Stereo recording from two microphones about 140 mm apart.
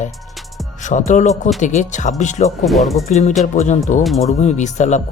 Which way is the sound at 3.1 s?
55° left (ahead or behind).